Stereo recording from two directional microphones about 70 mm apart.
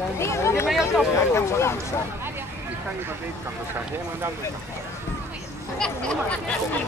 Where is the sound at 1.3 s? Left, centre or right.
Left.